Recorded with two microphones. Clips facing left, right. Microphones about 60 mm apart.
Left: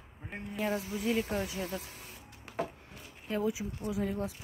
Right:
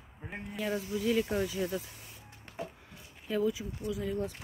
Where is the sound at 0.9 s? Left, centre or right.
Left.